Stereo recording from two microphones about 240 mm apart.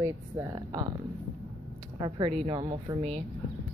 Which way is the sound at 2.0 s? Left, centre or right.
Right.